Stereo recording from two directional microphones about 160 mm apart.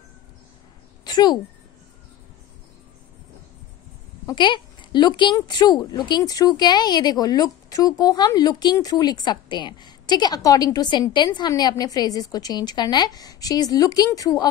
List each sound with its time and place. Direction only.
1.0 s speech: 25° left (ahead or behind)
4.3 s speech: 30° left (ahead or behind)